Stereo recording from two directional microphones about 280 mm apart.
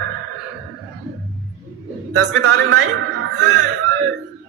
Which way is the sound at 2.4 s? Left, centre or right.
Right.